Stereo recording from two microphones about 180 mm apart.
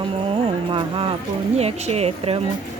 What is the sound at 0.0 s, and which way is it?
Music, 30° right (ahead or behind).